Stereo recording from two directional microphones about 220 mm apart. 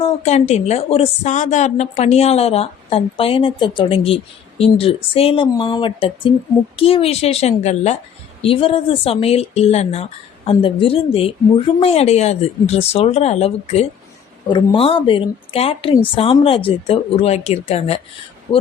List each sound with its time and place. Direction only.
0.0 s a woman's voice: 30° left (ahead or behind)